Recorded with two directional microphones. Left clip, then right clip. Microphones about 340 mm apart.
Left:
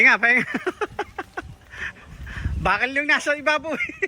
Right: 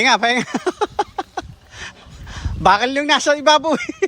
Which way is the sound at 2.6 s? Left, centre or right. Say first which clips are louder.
Right 6 dB; right.